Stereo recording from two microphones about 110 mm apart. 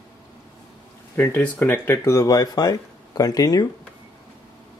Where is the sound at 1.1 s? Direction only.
15° left (ahead or behind); by 3.6 s 35° left (ahead or behind).